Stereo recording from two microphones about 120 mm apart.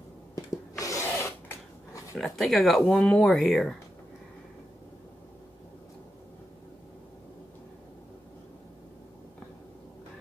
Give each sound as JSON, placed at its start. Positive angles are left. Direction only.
{"t": 0.7, "sound": "rub", "side_deg": 25}
{"t": 2.1, "sound": "speech", "side_deg": 0}